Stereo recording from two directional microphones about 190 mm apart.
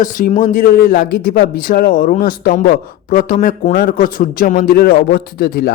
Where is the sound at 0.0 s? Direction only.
45° left (ahead or behind).